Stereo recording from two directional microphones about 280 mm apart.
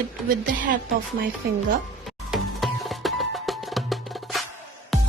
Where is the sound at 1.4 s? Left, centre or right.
Right.